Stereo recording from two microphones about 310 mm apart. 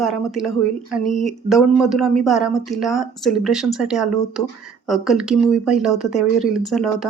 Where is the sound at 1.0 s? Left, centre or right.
Left.